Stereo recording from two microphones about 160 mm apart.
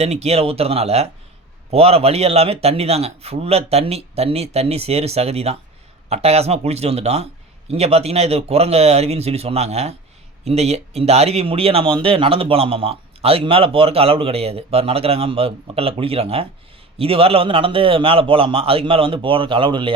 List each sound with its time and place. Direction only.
0.0 s speech: 40° right (ahead or behind)